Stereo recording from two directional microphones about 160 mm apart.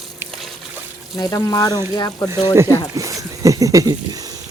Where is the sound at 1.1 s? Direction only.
25° left (ahead or behind).